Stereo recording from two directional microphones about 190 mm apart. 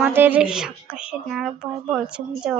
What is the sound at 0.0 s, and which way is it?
A woman's voice, 10° right (ahead or behind).